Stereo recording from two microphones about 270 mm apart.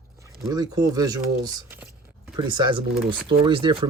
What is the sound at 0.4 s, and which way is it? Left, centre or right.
Speech, centre.